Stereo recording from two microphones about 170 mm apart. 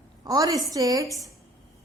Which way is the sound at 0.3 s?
20° right (ahead or behind).